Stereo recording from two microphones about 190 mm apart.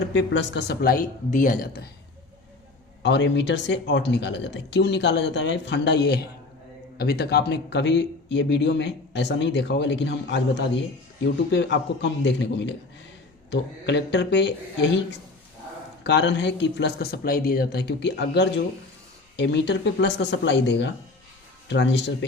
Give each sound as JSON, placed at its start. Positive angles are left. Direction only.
{"t": 0.1, "sound": "speech", "side_deg": 75}
{"t": 3.0, "sound": "speech", "side_deg": 65}
{"t": 16.0, "sound": "speech", "side_deg": 65}